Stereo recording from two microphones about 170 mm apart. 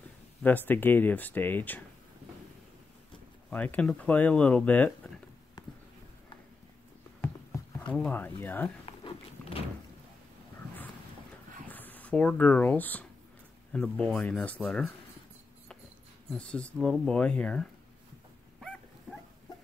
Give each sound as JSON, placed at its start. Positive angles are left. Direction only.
{"t": 0.4, "sound": "speech", "side_deg": 10}
{"t": 3.4, "sound": "speech", "side_deg": 10}
{"t": 7.9, "sound": "speech", "side_deg": 10}
{"t": 8.8, "sound": "a sound", "side_deg": 35}
{"t": 11.6, "sound": "speech", "side_deg": 10}
{"t": 16.3, "sound": "speech", "side_deg": 5}